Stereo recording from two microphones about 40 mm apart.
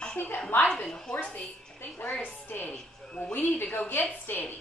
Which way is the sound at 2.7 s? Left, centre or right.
Left.